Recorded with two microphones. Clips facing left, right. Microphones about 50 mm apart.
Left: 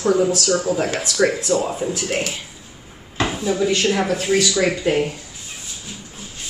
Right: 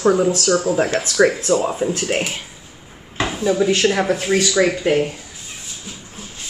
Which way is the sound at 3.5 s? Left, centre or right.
Centre.